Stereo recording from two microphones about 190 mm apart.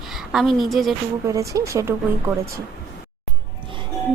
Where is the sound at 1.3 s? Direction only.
15° right (ahead or behind).